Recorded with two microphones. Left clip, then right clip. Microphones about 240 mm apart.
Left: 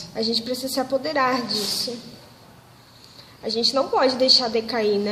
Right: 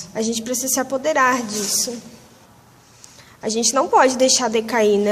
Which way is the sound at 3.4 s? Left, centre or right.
Right.